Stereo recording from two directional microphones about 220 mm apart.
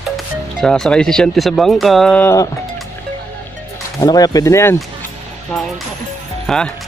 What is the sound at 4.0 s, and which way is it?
Speech, 15° left (ahead or behind).